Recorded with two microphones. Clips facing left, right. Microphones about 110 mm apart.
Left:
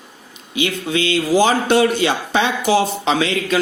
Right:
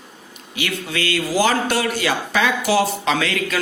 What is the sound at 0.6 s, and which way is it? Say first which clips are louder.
A man's voice: left 5 dB; 20° left (ahead or behind).